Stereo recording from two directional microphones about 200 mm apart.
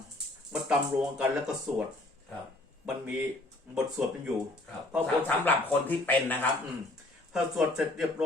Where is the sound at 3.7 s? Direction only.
5° right (ahead or behind).